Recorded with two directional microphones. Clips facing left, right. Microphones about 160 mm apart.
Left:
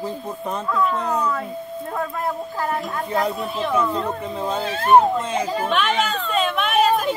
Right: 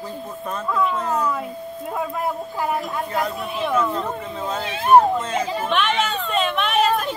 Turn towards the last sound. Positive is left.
turn(degrees=5)  # may be behind; listen again after turning